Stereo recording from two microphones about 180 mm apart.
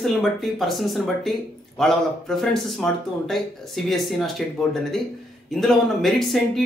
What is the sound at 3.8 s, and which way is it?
Speech, centre (ahead or behind).